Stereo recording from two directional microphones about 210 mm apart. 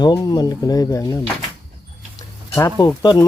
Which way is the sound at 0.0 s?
20° left (ahead or behind).